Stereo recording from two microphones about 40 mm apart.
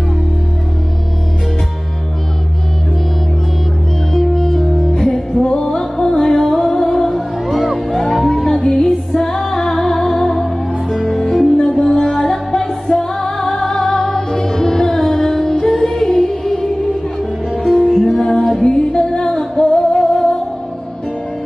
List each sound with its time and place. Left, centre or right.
4.1 s music: centre
5.4 s music: left
5.8 s music: centre
11.5 s music: centre
12.2 s music: centre
17.8 s music: centre
18.4 s music: centre